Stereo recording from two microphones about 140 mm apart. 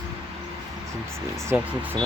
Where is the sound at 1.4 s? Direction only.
15° right (ahead or behind).